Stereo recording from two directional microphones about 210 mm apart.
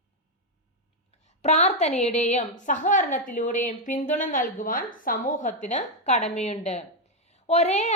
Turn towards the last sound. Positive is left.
turn(degrees=35)  # may be behind; listen again after turning